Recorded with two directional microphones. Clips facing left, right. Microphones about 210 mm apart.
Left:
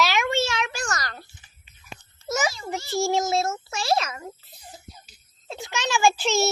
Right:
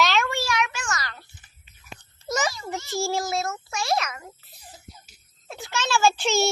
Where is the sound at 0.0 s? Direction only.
10° left (ahead or behind).